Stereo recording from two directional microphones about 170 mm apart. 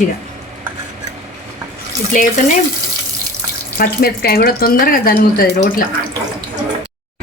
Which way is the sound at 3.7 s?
60° left (ahead or behind).